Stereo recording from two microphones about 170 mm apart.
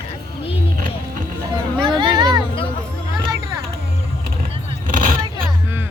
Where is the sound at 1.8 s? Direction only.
25° right (ahead or behind).